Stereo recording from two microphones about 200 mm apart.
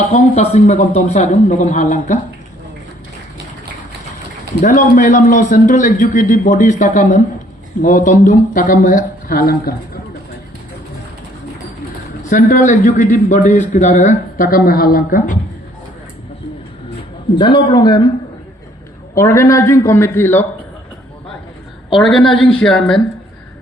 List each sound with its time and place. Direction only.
0.1 s speech: 35° left (ahead or behind)
4.6 s speech: 40° left (ahead or behind)
12.3 s speech: 40° left (ahead or behind)
17.3 s a man's voice: 25° left (ahead or behind)
19.1 s a man's voice: 15° left (ahead or behind)
21.8 s a woman's voice: centre (ahead or behind)